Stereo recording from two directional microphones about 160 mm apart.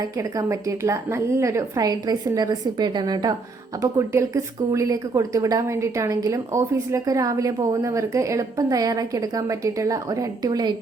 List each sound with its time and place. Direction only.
0.0 s a woman's voice: 20° right (ahead or behind)